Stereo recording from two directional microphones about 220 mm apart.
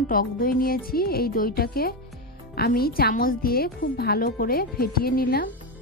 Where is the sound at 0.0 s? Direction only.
40° left (ahead or behind).